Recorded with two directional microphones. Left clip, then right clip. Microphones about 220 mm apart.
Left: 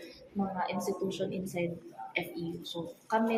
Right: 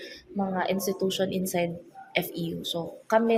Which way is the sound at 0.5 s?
50° right (ahead or behind).